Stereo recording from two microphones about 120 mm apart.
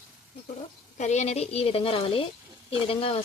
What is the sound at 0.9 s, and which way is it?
Speech, 70° left (ahead or behind).